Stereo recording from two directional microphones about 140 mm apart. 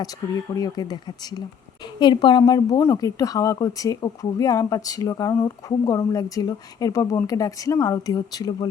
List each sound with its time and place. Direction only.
0.5 s speech: 25° left (ahead or behind)